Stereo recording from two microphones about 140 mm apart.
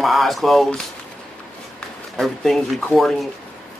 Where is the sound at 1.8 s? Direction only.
5° left (ahead or behind).